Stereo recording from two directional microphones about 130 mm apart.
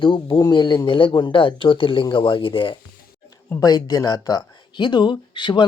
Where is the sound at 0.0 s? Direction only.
40° left (ahead or behind).